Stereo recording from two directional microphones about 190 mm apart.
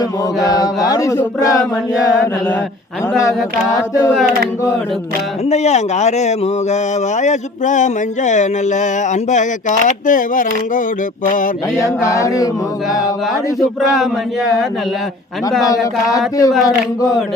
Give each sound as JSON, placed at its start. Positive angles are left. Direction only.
{"t": 0.4, "sound": "chant", "side_deg": 20}
{"t": 3.2, "sound": "chant", "side_deg": 15}
{"t": 5.5, "sound": "speech", "side_deg": 35}
{"t": 11.3, "sound": "mantra", "side_deg": 45}
{"t": 11.8, "sound": "chant", "side_deg": 15}
{"t": 15.6, "sound": "chant", "side_deg": 20}